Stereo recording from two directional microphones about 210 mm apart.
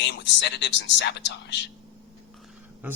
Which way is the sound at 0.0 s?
55° left (ahead or behind).